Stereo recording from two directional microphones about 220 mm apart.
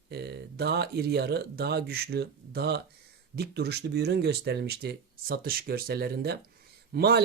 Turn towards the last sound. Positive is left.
turn(degrees=-45)  # may be behind; listen again after turning